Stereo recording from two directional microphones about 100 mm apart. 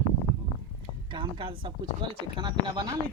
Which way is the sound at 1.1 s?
55° right (ahead or behind).